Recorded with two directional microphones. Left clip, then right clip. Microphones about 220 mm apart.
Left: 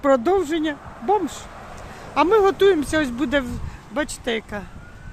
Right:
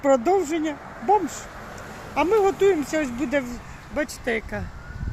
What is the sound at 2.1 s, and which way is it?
Speech, 15° left (ahead or behind).